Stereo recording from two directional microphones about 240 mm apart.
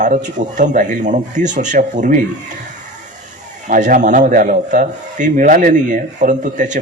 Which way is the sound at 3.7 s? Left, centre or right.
Right.